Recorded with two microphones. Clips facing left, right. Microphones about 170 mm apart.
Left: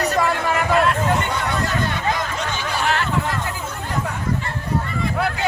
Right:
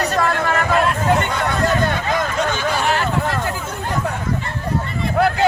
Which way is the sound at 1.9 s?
50° right (ahead or behind).